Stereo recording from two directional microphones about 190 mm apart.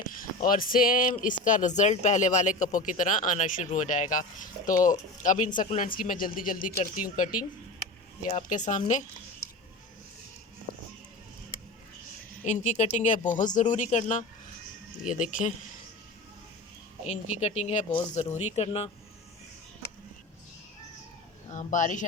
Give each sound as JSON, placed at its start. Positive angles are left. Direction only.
{"t": 0.2, "sound": "speech", "side_deg": 45}
{"t": 12.5, "sound": "speech", "side_deg": 40}
{"t": 17.1, "sound": "speech", "side_deg": 35}
{"t": 21.5, "sound": "speech", "side_deg": 40}